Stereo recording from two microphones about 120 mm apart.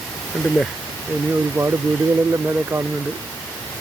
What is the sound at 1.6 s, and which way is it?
Speech, 25° right (ahead or behind).